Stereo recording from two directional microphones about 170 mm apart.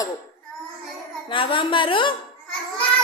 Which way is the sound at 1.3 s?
30° left (ahead or behind).